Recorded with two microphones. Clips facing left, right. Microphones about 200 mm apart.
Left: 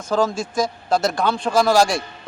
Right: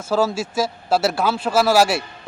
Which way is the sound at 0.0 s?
5° right (ahead or behind).